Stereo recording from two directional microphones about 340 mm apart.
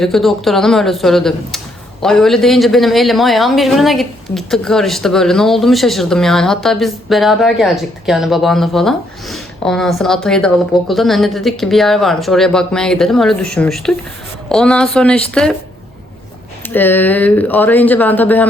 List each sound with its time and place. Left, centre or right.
0.0 s speech: centre
16.6 s speech: centre